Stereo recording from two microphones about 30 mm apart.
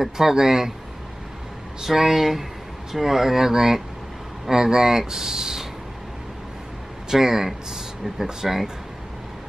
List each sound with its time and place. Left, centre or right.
0.0 s speech: centre
1.8 s speech: centre
7.1 s speech: centre